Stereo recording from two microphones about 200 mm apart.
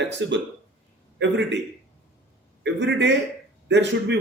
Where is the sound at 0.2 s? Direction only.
65° right (ahead or behind).